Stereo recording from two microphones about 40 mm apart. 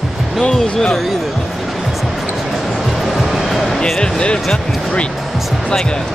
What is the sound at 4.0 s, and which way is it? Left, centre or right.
Speech, left.